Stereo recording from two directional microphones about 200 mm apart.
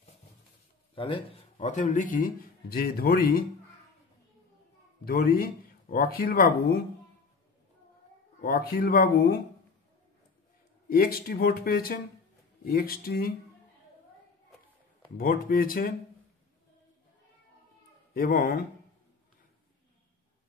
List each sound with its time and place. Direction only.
0.9 s speech: 25° left (ahead or behind); by 3.4 s 45° left (ahead or behind)
5.0 s speech: 50° left (ahead or behind)
8.4 s speech: 45° left (ahead or behind)
10.9 s speech: 50° left (ahead or behind)
15.1 s speech: 45° left (ahead or behind)
18.1 s speech: 45° left (ahead or behind)